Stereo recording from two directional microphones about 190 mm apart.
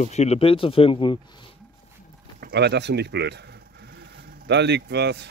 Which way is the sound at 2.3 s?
60° right (ahead or behind).